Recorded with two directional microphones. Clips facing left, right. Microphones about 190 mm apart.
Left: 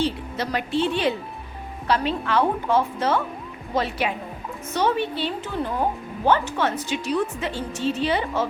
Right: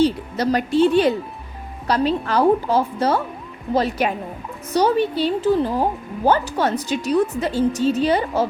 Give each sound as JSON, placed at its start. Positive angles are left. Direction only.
{"t": 0.0, "sound": "a woman's voice", "side_deg": -40}